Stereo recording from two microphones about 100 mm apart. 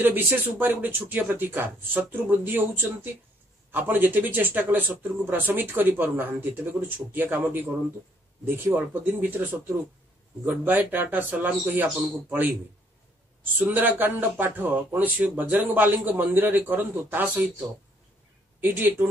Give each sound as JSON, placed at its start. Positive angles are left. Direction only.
{"t": 0.0, "sound": "a man's voice", "side_deg": -20}
{"t": 18.6, "sound": "a man's voice", "side_deg": -20}